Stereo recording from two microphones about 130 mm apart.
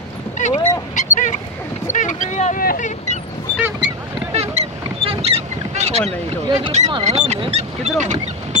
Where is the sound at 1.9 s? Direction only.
75° left (ahead or behind).